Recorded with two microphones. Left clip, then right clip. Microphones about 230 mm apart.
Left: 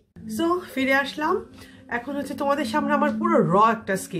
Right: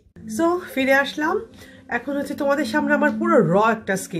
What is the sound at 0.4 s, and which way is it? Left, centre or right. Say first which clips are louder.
Speech: right 3 dB; centre.